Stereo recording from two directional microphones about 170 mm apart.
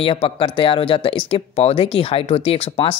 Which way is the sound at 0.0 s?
35° left (ahead or behind).